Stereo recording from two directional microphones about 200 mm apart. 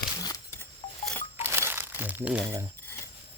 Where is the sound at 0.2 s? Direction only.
15° left (ahead or behind).